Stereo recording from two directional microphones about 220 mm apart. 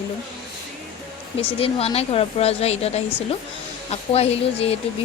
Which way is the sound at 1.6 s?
25° left (ahead or behind).